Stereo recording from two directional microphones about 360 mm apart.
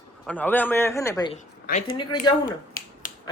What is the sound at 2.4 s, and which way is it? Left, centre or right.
Finger snapping, left.